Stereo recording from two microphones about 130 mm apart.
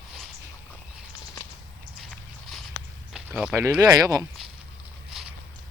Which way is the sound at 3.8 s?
30° right (ahead or behind).